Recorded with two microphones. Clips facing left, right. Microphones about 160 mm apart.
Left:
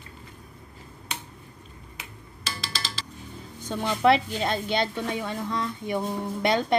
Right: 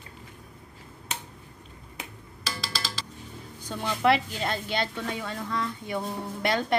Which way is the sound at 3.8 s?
20° left (ahead or behind).